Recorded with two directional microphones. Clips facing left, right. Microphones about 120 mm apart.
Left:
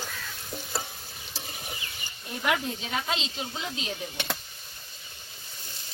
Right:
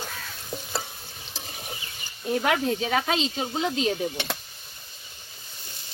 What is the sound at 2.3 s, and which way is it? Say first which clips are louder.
Speech: right 5 dB; 65° right (ahead or behind).